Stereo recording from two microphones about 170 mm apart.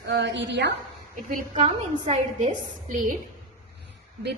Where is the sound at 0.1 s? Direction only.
90° right.